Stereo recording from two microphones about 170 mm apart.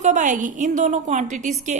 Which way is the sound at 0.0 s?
45° right (ahead or behind).